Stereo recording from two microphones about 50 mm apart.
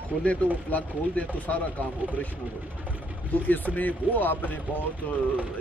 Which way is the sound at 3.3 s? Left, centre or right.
Left.